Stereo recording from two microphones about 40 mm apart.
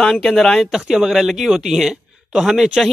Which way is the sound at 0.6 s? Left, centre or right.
Centre.